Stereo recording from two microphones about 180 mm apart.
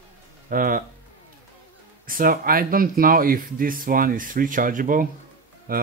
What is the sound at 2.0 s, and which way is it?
Speech, 50° right (ahead or behind).